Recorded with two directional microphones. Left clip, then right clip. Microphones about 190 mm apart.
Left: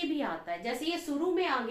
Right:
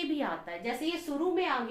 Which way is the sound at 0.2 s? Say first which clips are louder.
Even; 20° right (ahead or behind).